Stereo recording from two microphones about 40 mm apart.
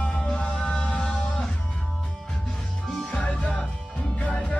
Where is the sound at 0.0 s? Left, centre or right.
Left.